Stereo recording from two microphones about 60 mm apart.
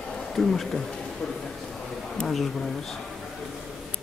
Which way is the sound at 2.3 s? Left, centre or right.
Centre.